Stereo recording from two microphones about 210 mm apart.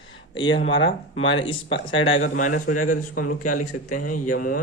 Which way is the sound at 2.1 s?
35° left (ahead or behind).